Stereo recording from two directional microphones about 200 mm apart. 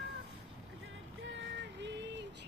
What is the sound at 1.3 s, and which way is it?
Music, 65° right (ahead or behind).